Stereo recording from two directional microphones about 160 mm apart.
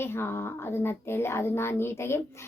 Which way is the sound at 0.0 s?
15° left (ahead or behind).